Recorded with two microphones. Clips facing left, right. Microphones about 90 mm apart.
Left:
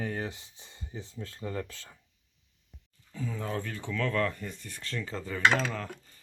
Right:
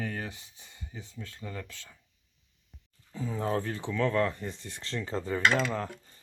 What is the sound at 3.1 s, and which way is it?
Speech, 25° right (ahead or behind).